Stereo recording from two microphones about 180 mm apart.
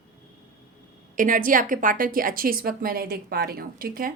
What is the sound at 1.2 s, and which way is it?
A woman's voice, 50° right (ahead or behind).